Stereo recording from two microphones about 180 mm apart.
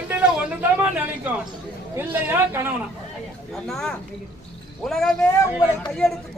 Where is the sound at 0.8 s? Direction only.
10° right (ahead or behind).